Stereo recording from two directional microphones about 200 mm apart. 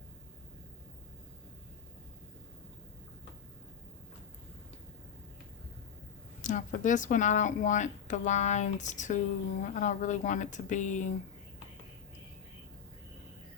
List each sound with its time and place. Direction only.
6.4 s speech: 40° left (ahead or behind)